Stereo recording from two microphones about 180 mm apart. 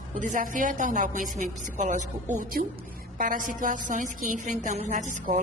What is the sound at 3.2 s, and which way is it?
A woman's voice, 50° right (ahead or behind).